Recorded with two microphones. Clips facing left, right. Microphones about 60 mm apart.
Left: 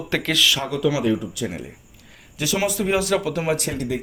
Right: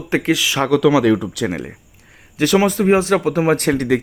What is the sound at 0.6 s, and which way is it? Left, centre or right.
Speech, right.